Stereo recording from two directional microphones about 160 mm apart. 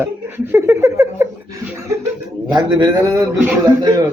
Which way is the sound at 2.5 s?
25° right (ahead or behind).